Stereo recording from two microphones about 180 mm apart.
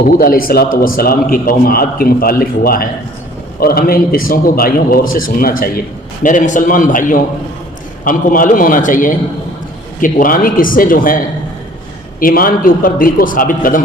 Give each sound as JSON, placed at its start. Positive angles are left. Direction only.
{"t": 0.0, "sound": "a man's voice", "side_deg": 55}
{"t": 6.2, "sound": "a man's voice", "side_deg": 45}
{"t": 12.2, "sound": "a man's voice", "side_deg": 50}